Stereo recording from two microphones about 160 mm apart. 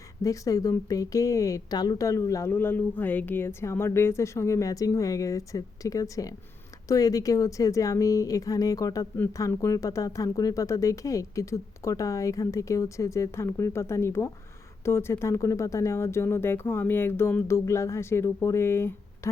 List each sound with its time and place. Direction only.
0.2 s speech: 20° left (ahead or behind)